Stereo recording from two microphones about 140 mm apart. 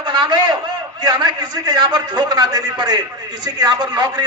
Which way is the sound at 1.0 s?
30° right (ahead or behind).